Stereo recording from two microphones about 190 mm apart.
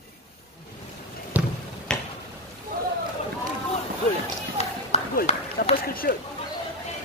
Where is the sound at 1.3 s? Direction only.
10° right (ahead or behind).